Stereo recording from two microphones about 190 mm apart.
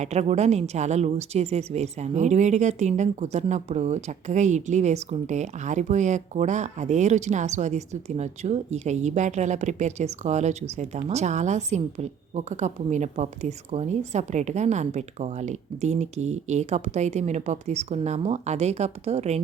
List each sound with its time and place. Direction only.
0.0 s a woman's voice: 35° right (ahead or behind)